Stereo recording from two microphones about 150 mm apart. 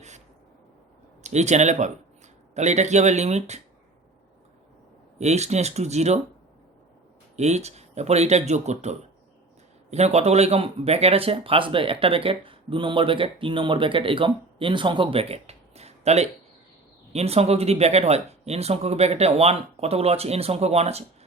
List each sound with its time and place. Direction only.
1.2 s speech: 50° right (ahead or behind)
5.1 s speech: 45° right (ahead or behind)
7.3 s speech: 50° right (ahead or behind)